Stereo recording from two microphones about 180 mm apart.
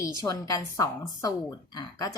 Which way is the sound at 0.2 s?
20° left (ahead or behind).